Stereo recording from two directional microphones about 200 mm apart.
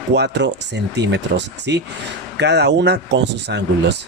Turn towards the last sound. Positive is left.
turn(degrees=-60)  # may be behind; listen again after turning